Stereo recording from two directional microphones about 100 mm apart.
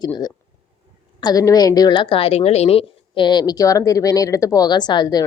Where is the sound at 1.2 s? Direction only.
40° left (ahead or behind); by 3.2 s 80° left.